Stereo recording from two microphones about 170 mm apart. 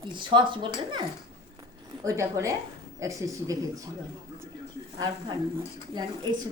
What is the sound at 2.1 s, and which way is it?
A woman's voice, 20° right (ahead or behind).